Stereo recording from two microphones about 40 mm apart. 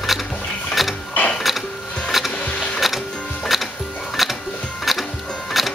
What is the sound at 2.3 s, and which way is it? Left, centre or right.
Sewing machine, left.